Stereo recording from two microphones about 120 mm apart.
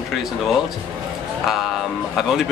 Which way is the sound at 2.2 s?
Centre (ahead or behind).